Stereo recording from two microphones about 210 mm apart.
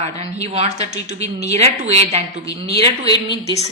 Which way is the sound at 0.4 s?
30° right (ahead or behind).